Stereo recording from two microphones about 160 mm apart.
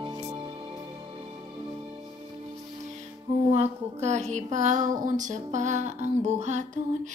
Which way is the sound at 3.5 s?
45° right (ahead or behind).